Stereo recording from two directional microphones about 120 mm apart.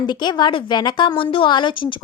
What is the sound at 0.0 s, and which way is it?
A woman's voice, 40° left (ahead or behind).